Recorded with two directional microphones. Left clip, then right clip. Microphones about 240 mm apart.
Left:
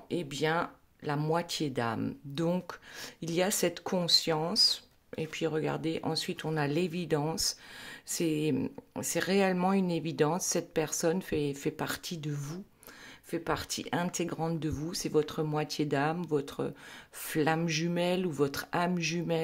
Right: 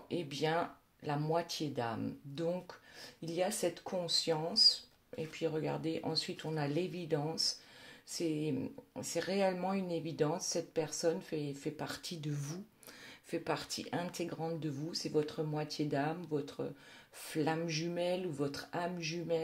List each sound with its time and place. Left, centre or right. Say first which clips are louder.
0.1 s speech: left 4 dB; left